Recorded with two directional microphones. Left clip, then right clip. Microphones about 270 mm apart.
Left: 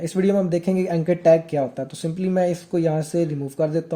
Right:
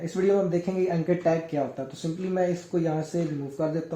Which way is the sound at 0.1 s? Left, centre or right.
Left.